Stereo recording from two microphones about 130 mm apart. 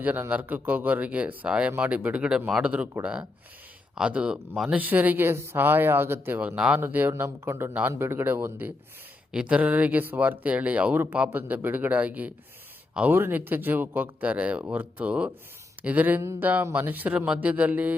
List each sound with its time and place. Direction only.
0.0 s speech: 15° right (ahead or behind)